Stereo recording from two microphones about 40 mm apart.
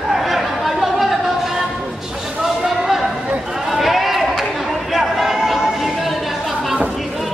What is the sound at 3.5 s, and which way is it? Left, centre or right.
Chatter, centre.